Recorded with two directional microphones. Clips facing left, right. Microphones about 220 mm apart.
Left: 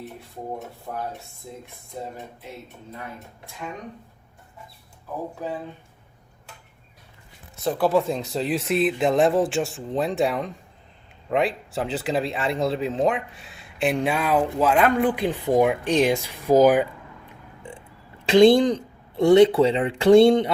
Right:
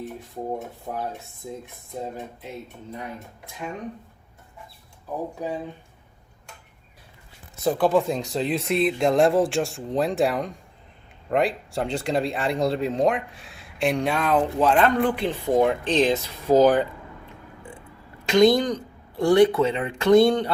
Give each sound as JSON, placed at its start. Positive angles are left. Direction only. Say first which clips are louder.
{"t": 0.9, "sound": "speech", "louder": "right 1 dB", "side_deg": -20}
{"t": 2.9, "sound": "speech", "louder": "right 2 dB", "side_deg": -15}
{"t": 5.4, "sound": "speech", "louder": "right 1 dB", "side_deg": -15}
{"t": 7.5, "sound": "speech", "louder": "right 1 dB", "side_deg": 0}
{"t": 17.6, "sound": "a sound", "louder": "left 4 dB", "side_deg": 25}
{"t": 18.3, "sound": "speech", "louder": "left 3 dB", "side_deg": 30}